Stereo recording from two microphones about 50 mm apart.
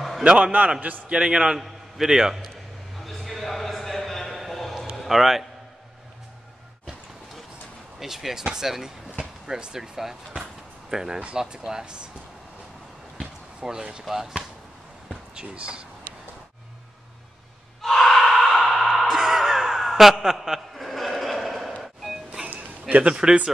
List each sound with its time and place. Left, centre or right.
0.2 s a man's voice: right
1.1 s a man's voice: centre
3.0 s a sound: centre
4.9 s a man's voice: centre
8.0 s speech: centre
13.2 s a sound: centre
14.0 s speech: centre
15.3 s speech: right
17.8 s gasp: centre
18.8 s music: centre
19.0 s a sound: centre
22.5 s a sound: right
23.1 s speech: centre